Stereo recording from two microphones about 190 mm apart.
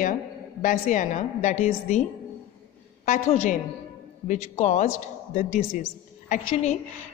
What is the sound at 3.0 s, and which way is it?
A woman's voice, 40° left (ahead or behind).